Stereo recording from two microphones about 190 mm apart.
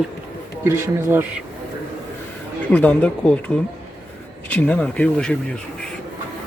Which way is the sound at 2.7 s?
5° left (ahead or behind).